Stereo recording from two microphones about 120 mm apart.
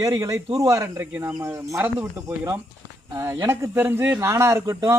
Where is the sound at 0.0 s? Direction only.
30° right (ahead or behind).